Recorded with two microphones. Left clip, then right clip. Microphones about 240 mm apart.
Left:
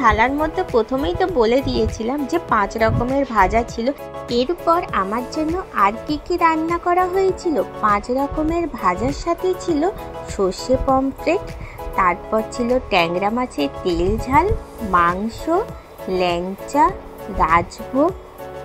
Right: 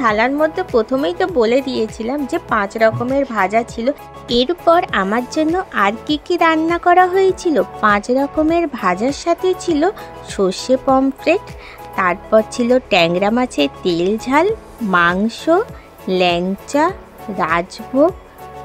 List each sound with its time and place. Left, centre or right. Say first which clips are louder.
0.0 s speech: right 1 dB; right
4.4 s speech: right 5 dB; right